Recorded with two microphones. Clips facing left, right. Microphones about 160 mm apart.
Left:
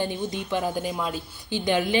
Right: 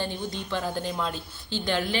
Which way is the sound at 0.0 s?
15° left (ahead or behind).